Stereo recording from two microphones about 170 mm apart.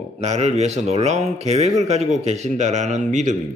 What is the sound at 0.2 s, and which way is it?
A man's voice, 40° right (ahead or behind).